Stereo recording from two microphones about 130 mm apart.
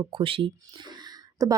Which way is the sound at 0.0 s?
40° right (ahead or behind).